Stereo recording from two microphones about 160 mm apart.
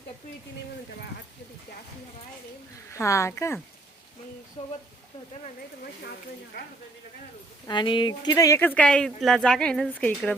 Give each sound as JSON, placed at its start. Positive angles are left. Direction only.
{"t": 2.9, "sound": "speech", "side_deg": 20}
{"t": 4.6, "sound": "speech", "side_deg": 40}
{"t": 7.7, "sound": "speech", "side_deg": 30}